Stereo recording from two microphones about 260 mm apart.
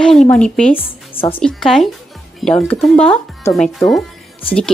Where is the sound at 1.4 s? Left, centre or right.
Centre.